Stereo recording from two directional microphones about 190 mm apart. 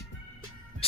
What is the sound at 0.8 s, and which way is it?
Music, 30° left (ahead or behind).